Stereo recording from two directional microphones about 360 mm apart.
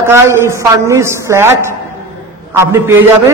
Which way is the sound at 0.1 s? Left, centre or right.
Centre.